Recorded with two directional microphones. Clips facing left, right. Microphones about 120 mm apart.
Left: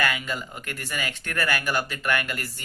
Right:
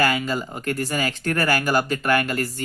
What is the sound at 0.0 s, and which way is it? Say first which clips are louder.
Speech: right 6 dB; 35° right (ahead or behind).